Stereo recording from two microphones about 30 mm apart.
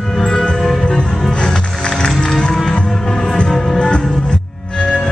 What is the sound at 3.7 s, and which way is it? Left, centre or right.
Music, left.